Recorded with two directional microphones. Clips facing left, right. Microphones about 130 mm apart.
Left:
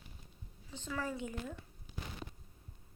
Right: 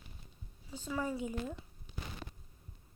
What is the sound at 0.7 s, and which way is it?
Speech, 10° right (ahead or behind).